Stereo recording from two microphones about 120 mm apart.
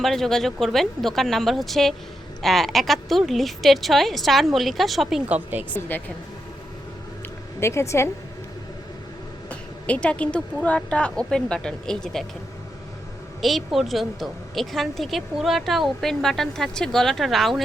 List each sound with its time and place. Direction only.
0.0 s a woman's voice: centre (ahead or behind)
5.9 s speech: 15° left (ahead or behind)
7.6 s a woman's voice: 25° left (ahead or behind)
9.5 s speech: 10° left (ahead or behind)
13.4 s a woman's voice: centre (ahead or behind)